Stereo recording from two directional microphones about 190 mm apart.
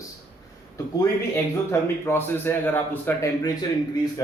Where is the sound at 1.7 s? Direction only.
10° left (ahead or behind).